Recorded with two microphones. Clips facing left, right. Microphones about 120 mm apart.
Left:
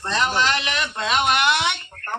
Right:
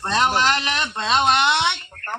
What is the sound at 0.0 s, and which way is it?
A man's voice, 45° right (ahead or behind).